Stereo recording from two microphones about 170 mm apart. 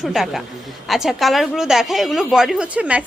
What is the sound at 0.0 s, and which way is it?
A woman's voice, centre (ahead or behind).